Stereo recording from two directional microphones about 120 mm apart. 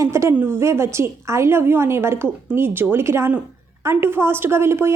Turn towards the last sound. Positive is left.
turn(degrees=-20)  # may be behind; listen again after turning